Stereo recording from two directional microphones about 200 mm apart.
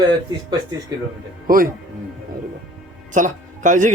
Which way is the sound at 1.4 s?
45° right (ahead or behind).